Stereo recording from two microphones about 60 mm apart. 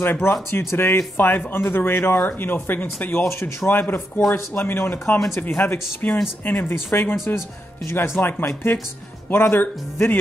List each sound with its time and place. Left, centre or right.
0.0 s speech: left
3.3 s speech: left